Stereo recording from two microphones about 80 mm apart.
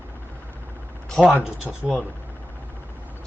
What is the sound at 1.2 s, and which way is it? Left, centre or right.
Speech, centre.